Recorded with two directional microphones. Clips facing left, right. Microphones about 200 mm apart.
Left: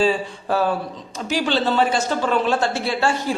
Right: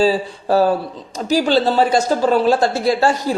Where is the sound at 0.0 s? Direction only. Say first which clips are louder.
Right 3 dB; 35° right (ahead or behind).